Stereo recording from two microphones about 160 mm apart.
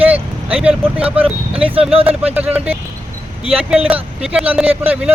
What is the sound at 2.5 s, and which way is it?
Speech, 10° right (ahead or behind).